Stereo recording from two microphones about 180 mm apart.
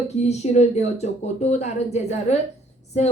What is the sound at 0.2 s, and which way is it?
Speech, 35° left (ahead or behind).